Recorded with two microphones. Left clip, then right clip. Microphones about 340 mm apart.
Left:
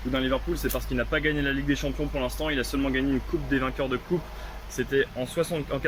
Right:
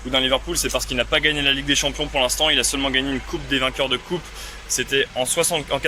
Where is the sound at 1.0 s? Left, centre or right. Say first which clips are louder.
Right 7 dB; centre.